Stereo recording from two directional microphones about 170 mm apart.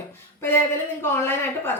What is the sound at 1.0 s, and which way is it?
Speech, 15° left (ahead or behind).